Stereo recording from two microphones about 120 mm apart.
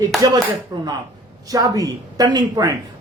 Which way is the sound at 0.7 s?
35° right (ahead or behind).